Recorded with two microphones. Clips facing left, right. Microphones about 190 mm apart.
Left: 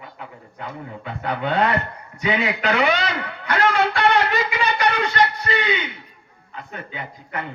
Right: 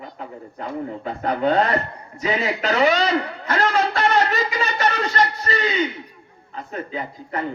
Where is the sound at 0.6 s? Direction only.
40° right (ahead or behind).